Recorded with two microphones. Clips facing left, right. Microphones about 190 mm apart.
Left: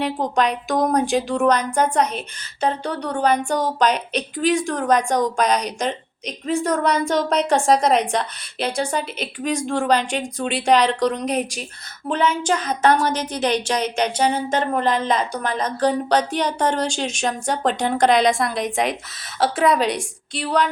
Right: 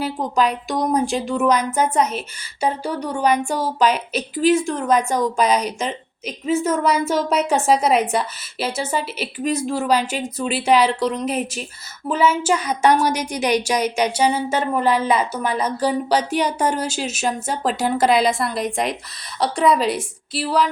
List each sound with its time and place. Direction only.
0.0 s a woman's voice: 5° right (ahead or behind)